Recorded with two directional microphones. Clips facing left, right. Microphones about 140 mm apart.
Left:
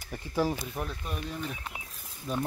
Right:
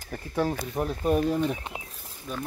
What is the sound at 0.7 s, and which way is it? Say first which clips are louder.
Speech: right 11 dB; 35° right (ahead or behind).